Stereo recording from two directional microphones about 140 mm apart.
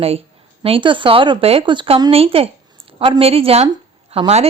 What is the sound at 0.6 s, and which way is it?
A woman's voice, 40° right (ahead or behind).